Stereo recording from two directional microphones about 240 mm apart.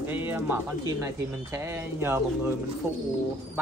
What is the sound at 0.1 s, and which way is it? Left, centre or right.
Speech, centre.